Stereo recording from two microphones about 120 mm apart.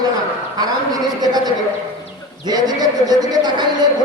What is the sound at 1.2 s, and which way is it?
Speech, 35° right (ahead or behind).